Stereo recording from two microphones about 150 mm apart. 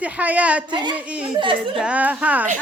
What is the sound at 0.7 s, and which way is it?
Speech, 30° right (ahead or behind).